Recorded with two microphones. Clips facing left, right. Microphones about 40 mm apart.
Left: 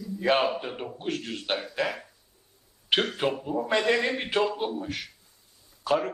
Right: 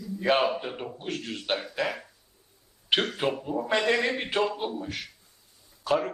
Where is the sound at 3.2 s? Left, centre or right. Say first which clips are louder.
Left 1 dB; centre.